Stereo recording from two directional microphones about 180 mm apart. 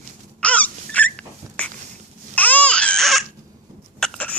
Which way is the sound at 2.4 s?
10° left (ahead or behind).